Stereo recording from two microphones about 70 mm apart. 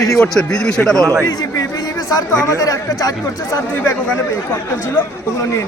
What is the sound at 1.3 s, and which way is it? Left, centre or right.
Speech, left.